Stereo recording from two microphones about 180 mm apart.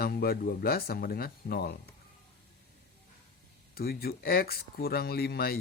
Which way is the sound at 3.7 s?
60° left (ahead or behind).